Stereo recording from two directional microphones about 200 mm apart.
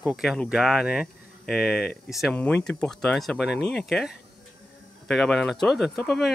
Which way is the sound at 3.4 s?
55° left (ahead or behind).